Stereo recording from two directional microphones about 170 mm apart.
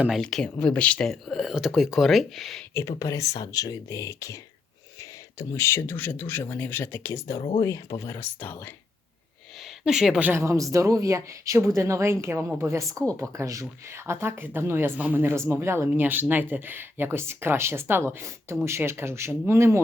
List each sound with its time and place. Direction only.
0.0 s speech: centre (ahead or behind)
3.0 s speech: 20° left (ahead or behind)
9.8 s speech: 5° right (ahead or behind)